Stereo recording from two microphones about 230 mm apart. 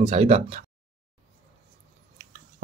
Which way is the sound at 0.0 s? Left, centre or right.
Right.